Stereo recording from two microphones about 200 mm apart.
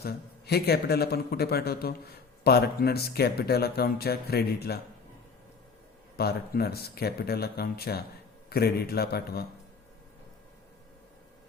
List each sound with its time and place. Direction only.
0.0 s speech: 50° left (ahead or behind)
6.1 s speech: 50° left (ahead or behind)